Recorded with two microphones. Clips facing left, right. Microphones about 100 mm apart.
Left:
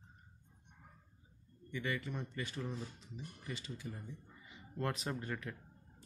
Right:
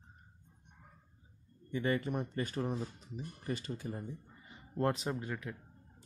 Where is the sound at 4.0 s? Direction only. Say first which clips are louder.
Right 6 dB; 45° right (ahead or behind).